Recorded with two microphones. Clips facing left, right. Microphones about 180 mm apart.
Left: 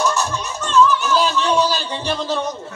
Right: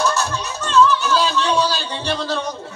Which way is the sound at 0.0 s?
15° left (ahead or behind).